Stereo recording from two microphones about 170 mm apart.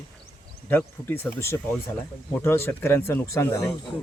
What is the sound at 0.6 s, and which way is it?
Speech, 10° left (ahead or behind).